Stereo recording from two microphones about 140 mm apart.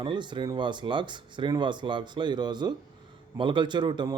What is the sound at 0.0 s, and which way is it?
Speech, 35° right (ahead or behind).